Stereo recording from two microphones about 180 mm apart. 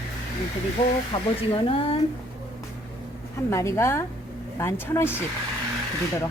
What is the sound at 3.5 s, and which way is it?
Speech, 15° left (ahead or behind).